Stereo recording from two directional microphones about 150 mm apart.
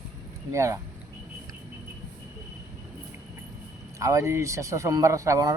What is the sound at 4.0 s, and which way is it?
Speech, 20° right (ahead or behind).